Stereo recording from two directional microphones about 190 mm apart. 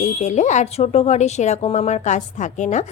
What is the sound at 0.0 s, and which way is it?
Speech, 40° left (ahead or behind).